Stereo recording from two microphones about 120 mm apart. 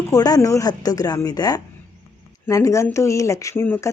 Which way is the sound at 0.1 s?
30° left (ahead or behind).